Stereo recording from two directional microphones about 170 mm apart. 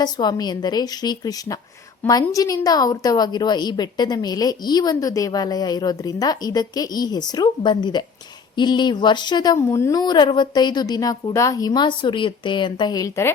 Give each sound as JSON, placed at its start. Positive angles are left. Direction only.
{"t": 0.0, "sound": "a woman's voice", "side_deg": 25}